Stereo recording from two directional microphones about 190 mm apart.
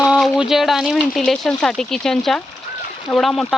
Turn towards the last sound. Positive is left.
turn(degrees=0)  # may be behind; listen again after turning